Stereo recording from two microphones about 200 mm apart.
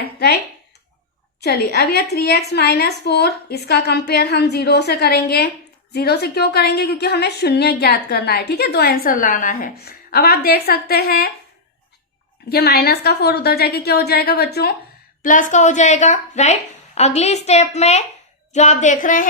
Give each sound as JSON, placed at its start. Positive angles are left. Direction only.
{"t": 1.4, "sound": "a woman's voice", "side_deg": 55}
{"t": 12.5, "sound": "a woman's voice", "side_deg": 50}
{"t": 15.2, "sound": "a woman's voice", "side_deg": 40}